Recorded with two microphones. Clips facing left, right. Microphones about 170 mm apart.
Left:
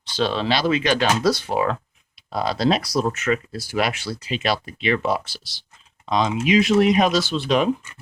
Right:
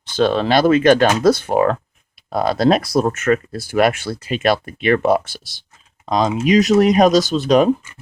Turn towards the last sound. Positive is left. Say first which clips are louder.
# right 6 dB
turn(degrees=-40)  # may be behind; listen again after turning